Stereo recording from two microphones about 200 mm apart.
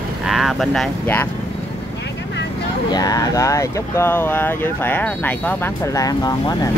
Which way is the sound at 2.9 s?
20° left (ahead or behind).